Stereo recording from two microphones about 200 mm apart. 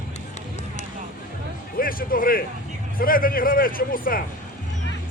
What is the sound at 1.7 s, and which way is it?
A man's voice, 45° left (ahead or behind).